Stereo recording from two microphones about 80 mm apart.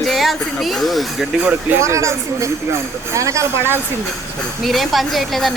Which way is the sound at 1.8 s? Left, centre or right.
Right.